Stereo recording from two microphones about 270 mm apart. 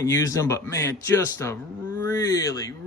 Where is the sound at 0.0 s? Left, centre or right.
Centre.